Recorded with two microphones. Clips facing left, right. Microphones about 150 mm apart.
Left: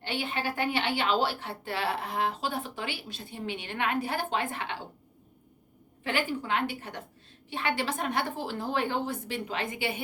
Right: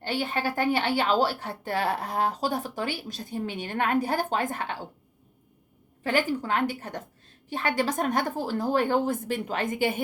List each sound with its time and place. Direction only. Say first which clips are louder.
0.0 s speech: right 4 dB; 40° right (ahead or behind)
6.0 s speech: right 5 dB; 40° right (ahead or behind)